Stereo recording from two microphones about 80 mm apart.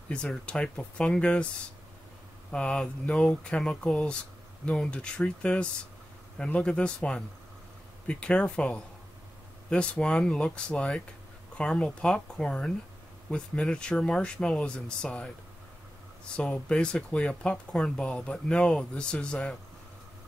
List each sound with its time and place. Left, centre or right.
0.1 s speech: centre
2.5 s speech: centre
16.3 s speech: centre